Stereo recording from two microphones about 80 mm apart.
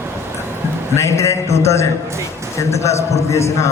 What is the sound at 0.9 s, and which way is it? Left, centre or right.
A man's voice, left.